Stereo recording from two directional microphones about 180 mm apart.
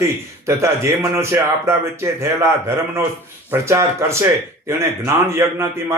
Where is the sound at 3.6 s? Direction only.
15° right (ahead or behind).